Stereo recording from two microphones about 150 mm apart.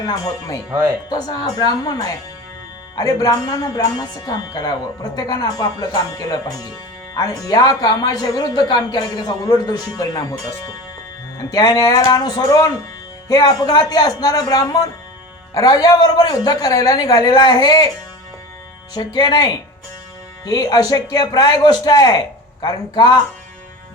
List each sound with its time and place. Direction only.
0.0 s speech: 25° left (ahead or behind)
0.7 s speech: 25° right (ahead or behind)
1.1 s speech: 25° left (ahead or behind)
11.5 s speech: 25° left (ahead or behind)
18.9 s speech: 30° left (ahead or behind)